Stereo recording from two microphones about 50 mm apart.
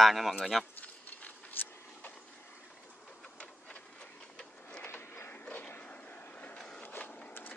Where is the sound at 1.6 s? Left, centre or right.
Left.